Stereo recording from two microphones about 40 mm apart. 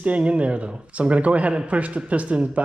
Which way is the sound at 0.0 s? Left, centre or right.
Right.